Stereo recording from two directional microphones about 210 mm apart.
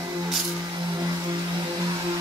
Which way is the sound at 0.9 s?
20° right (ahead or behind).